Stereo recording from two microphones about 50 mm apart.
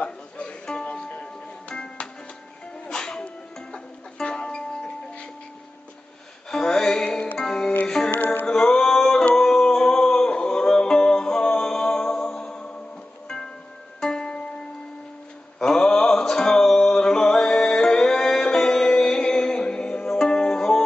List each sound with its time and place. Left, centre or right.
0.0 s music: left
6.5 s music: centre
7.1 s music: left
7.3 s music: centre
8.1 s music: left
8.5 s music: centre
13.9 s music: centre
15.6 s music: centre